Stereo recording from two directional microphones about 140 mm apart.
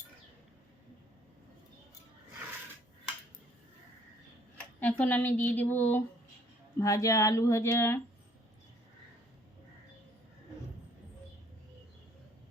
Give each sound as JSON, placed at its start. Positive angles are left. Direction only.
{"t": 4.8, "sound": "a woman's voice", "side_deg": 10}